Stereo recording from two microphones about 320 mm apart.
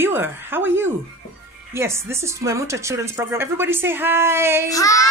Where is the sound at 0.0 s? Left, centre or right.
Centre.